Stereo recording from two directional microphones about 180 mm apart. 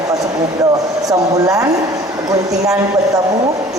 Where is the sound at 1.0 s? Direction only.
20° right (ahead or behind).